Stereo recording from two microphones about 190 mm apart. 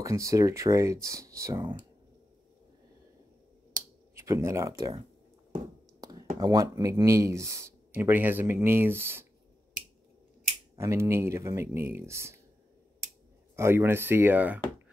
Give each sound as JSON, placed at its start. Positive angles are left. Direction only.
{"t": 0.0, "sound": "speech", "side_deg": -15}
{"t": 4.1, "sound": "speech", "side_deg": -15}
{"t": 6.0, "sound": "a sound", "side_deg": -20}
{"t": 6.4, "sound": "speech", "side_deg": -20}
{"t": 10.8, "sound": "speech", "side_deg": -15}
{"t": 13.6, "sound": "speech", "side_deg": -10}